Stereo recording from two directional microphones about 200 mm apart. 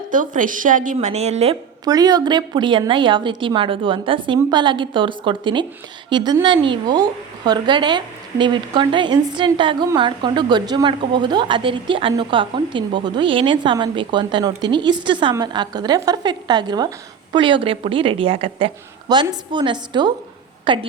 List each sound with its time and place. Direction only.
0.1 s a woman's voice: 40° right (ahead or behind)
1.8 s a woman's voice: 20° right (ahead or behind)